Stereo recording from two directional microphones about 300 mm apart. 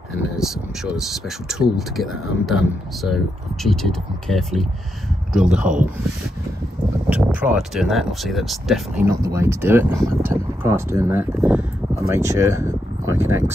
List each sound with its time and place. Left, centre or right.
0.4 s speech: centre
7.1 s speech: centre